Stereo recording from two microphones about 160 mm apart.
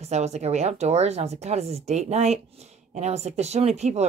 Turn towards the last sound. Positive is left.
turn(degrees=-45)  # may be behind; listen again after turning